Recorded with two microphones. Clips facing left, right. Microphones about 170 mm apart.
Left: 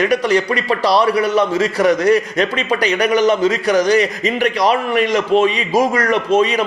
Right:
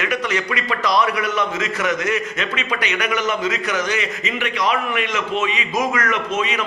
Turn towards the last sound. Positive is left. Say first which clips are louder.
# left 8 dB
turn(degrees=35)  # may be behind; listen again after turning